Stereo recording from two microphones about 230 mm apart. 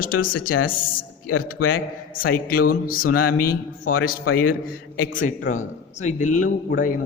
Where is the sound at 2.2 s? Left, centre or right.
Left.